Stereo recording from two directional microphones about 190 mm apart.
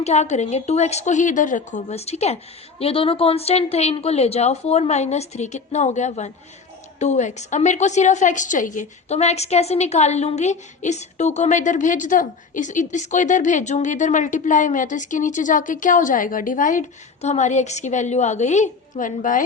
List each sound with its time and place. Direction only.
0.0 s a woman's voice: 35° left (ahead or behind)